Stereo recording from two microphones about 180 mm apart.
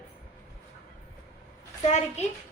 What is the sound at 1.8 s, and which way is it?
Speech, 40° left (ahead or behind).